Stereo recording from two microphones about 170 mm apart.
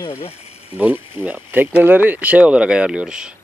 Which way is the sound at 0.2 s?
35° left (ahead or behind).